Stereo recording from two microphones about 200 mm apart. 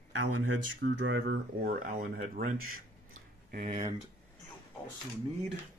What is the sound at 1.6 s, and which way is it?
Speech, 40° right (ahead or behind).